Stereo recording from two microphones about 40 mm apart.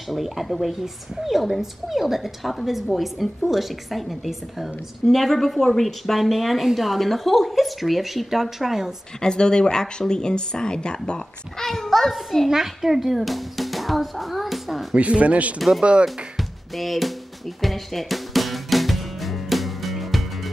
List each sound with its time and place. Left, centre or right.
0.1 s a woman's voice: centre
9.2 s a child's voice: centre
11.9 s a woman's voice: centre
15.0 s speech: right
16.3 s music: centre